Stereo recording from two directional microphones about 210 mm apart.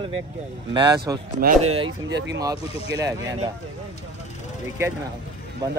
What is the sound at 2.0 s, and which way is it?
Speech, 55° right (ahead or behind).